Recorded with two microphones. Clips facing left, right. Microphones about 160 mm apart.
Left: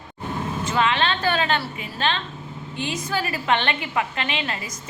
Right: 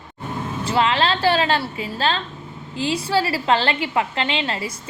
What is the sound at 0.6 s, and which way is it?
A woman's voice, 30° right (ahead or behind).